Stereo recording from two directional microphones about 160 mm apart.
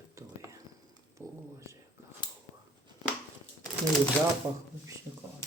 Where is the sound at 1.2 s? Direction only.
15° right (ahead or behind).